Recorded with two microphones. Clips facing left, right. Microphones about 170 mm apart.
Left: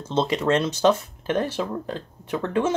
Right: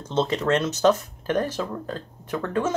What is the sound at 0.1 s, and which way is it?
Speech, 10° left (ahead or behind).